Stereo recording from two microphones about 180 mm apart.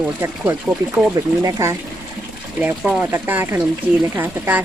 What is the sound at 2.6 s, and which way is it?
Speech, 5° right (ahead or behind).